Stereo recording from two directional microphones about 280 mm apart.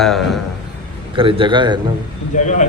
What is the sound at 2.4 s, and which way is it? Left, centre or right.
Speech, left.